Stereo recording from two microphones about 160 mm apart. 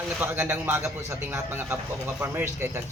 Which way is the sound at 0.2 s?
15° right (ahead or behind).